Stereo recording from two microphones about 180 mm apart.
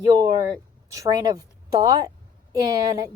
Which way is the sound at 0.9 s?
20° right (ahead or behind).